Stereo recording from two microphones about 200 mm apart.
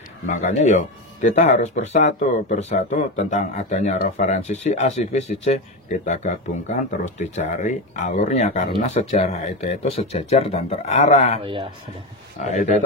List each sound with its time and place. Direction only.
0.3 s speech: 35° left (ahead or behind)
11.4 s speech: 25° right (ahead or behind)
12.4 s speech: 35° left (ahead or behind)